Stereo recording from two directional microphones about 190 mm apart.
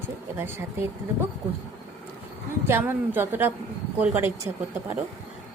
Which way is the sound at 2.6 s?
10° right (ahead or behind).